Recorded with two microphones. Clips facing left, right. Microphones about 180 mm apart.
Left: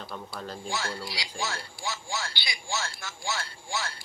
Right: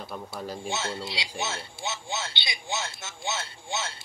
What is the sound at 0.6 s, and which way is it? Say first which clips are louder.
Speech: right 1 dB; 25° right (ahead or behind).